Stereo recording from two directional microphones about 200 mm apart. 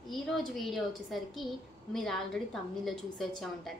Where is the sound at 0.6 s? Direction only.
Centre (ahead or behind).